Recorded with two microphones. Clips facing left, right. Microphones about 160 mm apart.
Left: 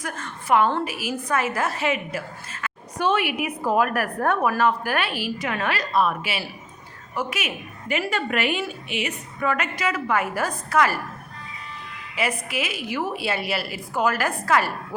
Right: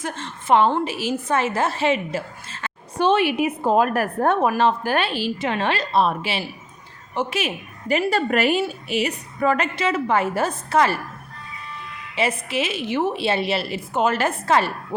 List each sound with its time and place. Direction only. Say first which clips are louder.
0.0 s a woman's voice: right 3 dB; 25° right (ahead or behind)
12.1 s a woman's voice: right 3 dB; 25° right (ahead or behind)